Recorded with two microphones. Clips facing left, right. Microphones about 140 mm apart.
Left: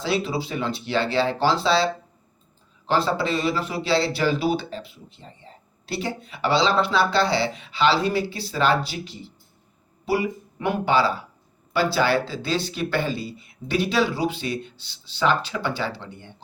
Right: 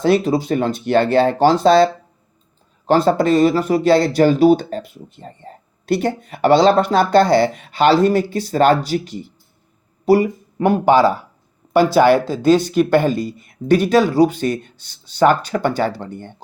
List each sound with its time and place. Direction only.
0.0 s speech: 45° right (ahead or behind)